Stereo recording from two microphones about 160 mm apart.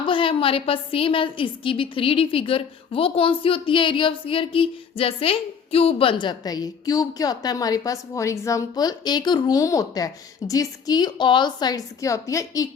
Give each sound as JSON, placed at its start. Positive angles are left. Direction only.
{"t": 0.0, "sound": "a woman's voice", "side_deg": 30}